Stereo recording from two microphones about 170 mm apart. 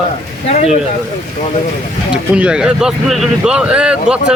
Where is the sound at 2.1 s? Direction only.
5° right (ahead or behind).